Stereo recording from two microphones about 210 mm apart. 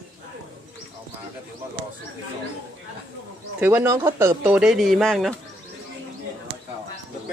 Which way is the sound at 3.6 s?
10° right (ahead or behind).